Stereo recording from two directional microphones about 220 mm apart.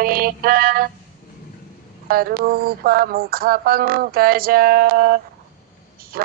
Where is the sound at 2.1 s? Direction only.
40° right (ahead or behind).